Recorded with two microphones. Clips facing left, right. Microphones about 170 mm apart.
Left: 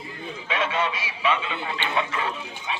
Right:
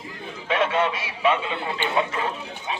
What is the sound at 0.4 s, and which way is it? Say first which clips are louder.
A man's voice: right 4 dB; 50° right (ahead or behind).